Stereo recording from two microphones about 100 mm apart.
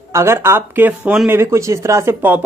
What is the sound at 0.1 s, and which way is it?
Speech, 25° right (ahead or behind).